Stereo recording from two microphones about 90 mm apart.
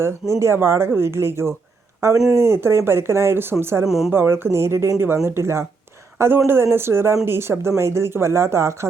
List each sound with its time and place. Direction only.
0.0 s speech: 30° right (ahead or behind)
3.8 s a woman's voice: 5° right (ahead or behind)
4.1 s speech: 25° right (ahead or behind)